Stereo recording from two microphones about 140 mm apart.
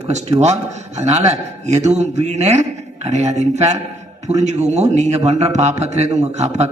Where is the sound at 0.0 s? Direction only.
50° right (ahead or behind).